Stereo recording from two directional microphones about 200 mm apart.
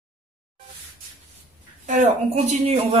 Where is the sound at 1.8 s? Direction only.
35° right (ahead or behind).